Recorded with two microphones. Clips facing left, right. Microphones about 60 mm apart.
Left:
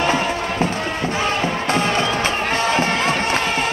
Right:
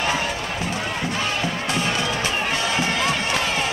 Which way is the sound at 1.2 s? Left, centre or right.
Left.